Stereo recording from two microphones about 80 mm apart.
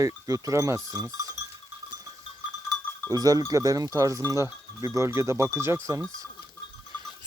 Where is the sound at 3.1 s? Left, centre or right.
Right.